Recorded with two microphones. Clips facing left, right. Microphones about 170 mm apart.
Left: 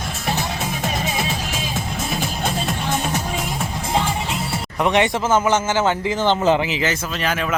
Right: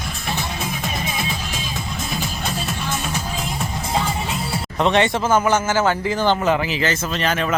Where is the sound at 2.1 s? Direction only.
50° left (ahead or behind).